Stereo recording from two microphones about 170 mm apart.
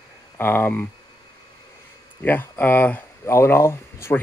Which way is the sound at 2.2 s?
10° left (ahead or behind).